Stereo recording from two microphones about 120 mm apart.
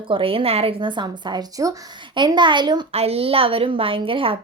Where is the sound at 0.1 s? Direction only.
50° right (ahead or behind).